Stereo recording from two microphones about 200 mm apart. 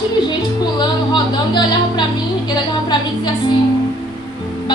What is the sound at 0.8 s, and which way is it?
A woman's voice, 20° left (ahead or behind).